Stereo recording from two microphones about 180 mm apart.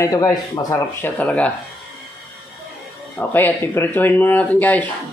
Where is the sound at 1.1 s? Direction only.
5° left (ahead or behind).